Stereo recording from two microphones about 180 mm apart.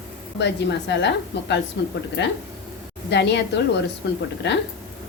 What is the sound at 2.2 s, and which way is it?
A woman's voice, 80° left.